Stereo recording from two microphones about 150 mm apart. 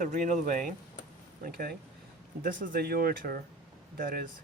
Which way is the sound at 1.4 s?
85° right.